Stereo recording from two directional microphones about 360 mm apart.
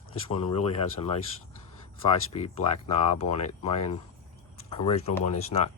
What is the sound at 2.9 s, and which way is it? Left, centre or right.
Speech, centre.